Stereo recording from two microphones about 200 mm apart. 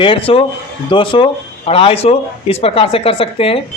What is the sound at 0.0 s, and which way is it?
Speech, 25° left (ahead or behind).